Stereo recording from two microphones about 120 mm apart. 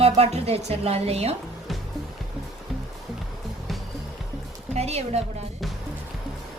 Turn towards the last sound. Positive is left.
turn(degrees=-60)  # may be behind; listen again after turning